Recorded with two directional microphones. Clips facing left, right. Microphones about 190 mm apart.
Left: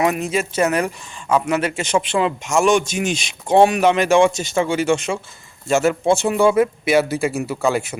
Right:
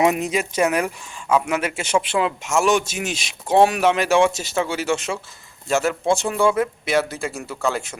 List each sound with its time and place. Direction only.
0.0 s a man's voice: 20° right (ahead or behind); by 7.9 s 10° left (ahead or behind)